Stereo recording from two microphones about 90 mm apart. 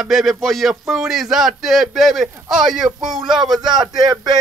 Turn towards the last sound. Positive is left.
turn(degrees=-50)  # may be behind; listen again after turning